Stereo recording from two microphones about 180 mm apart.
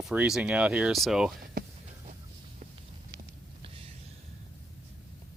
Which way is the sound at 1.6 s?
55° right (ahead or behind).